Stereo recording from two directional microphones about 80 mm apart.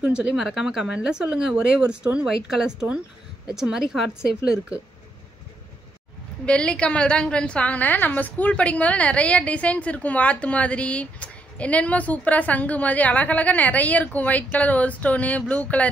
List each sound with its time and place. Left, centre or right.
0.0 s speech: centre
6.4 s a woman's voice: centre